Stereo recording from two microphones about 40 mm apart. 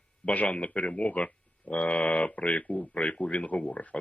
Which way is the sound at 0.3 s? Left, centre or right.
Left.